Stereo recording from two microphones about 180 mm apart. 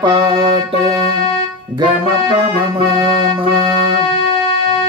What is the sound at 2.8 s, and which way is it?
Music, 25° right (ahead or behind).